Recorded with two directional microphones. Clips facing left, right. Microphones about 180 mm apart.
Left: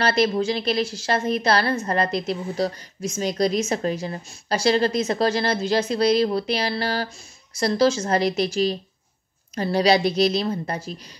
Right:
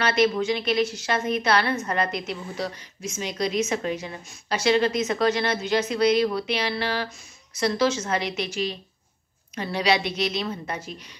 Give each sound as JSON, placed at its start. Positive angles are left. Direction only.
{"t": 0.0, "sound": "a woman's voice", "side_deg": 35}